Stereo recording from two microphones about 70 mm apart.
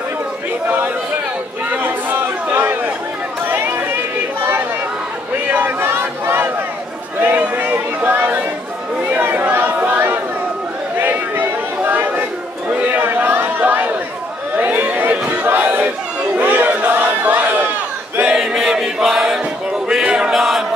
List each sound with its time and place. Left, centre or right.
1.7 s chatter: right
5.5 s a sound: right
9.1 s chatter: right
11.0 s a sound: right
14.6 s crowd: right
18.2 s chant: centre
19.9 s music: centre